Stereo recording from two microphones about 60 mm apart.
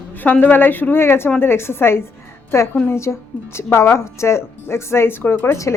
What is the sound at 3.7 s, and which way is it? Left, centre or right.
A woman's voice, left.